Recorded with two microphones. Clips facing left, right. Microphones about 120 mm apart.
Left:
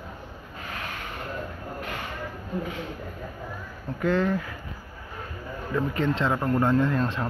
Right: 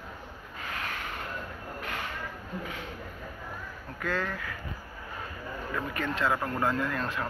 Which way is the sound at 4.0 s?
20° left (ahead or behind).